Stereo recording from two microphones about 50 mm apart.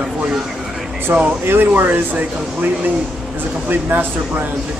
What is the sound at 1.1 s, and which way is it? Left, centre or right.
Speech, right.